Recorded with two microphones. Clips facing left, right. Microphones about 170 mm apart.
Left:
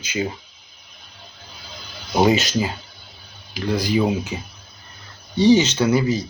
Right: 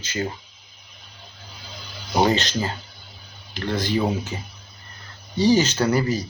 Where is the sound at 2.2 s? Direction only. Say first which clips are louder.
Left 3 dB; 10° left (ahead or behind).